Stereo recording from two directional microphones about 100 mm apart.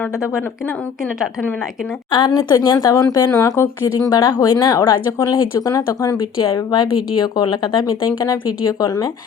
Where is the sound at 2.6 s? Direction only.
35° left (ahead or behind).